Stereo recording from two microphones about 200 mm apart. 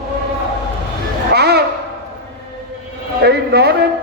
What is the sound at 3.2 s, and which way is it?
Speech, 55° right (ahead or behind).